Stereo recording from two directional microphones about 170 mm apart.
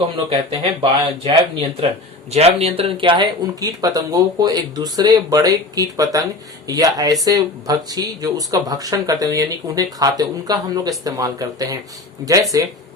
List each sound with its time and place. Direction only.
0.3 s speech: 30° right (ahead or behind)
2.3 s speech: 35° right (ahead or behind); by 12.6 s 20° right (ahead or behind)